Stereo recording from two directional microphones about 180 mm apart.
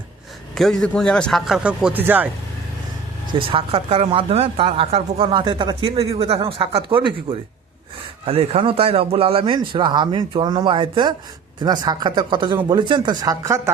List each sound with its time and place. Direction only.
0.5 s a man's voice: centre (ahead or behind)
3.3 s a man's voice: 30° right (ahead or behind)